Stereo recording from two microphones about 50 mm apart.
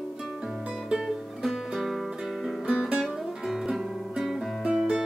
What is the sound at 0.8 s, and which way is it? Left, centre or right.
Music, centre.